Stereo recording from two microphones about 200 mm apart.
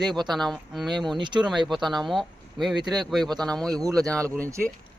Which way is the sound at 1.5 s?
Centre (ahead or behind).